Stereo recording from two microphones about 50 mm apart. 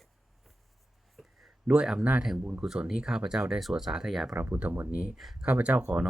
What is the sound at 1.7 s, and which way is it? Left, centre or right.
Speech, centre.